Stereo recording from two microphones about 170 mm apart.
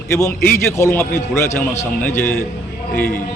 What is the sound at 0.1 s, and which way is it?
A man's voice, 15° left (ahead or behind).